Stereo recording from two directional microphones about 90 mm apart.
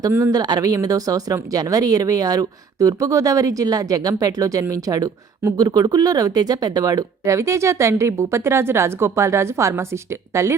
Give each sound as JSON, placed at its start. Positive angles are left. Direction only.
{"t": 0.1, "sound": "speech", "side_deg": -40}